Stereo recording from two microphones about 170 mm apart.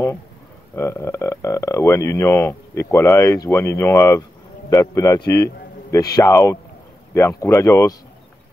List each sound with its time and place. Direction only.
0.7 s speech: 15° left (ahead or behind)